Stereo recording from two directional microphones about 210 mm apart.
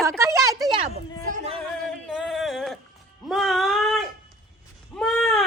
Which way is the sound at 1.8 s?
Centre (ahead or behind).